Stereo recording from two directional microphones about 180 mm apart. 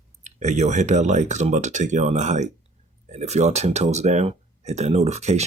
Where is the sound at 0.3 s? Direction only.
40° right (ahead or behind).